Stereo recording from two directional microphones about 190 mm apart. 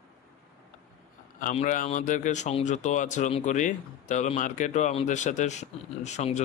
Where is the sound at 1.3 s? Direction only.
45° left (ahead or behind).